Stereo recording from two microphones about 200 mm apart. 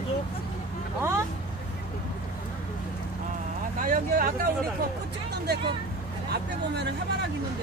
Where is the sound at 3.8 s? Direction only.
45° right (ahead or behind).